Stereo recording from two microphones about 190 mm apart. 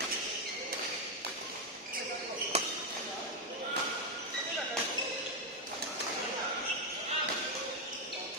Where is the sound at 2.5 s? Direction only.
35° right (ahead or behind).